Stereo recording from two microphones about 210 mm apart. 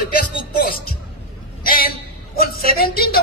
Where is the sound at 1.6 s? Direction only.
45° left (ahead or behind).